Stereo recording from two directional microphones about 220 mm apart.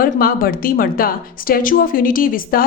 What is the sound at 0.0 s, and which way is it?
Speech, 40° left (ahead or behind).